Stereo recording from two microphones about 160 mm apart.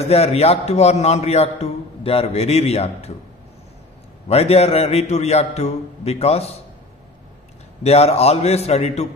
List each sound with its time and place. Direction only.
0.0 s a man's voice: 40° left (ahead or behind)
4.3 s a man's voice: 40° left (ahead or behind)
7.8 s a man's voice: 40° left (ahead or behind)